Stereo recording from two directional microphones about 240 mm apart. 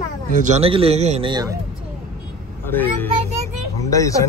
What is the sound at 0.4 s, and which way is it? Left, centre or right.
Speech, right.